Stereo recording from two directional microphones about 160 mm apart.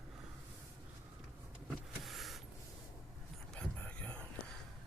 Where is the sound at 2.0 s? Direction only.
Centre (ahead or behind).